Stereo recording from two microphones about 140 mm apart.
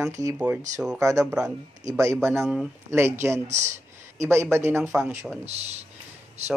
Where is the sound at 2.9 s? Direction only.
20° right (ahead or behind).